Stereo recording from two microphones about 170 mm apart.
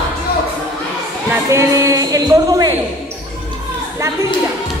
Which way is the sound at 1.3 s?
20° right (ahead or behind).